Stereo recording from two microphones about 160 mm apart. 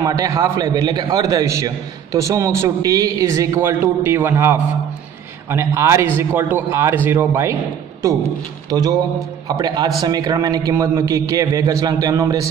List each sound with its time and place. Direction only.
0.0 s a man's voice: 20° right (ahead or behind)
8.6 s a man's voice: 25° right (ahead or behind)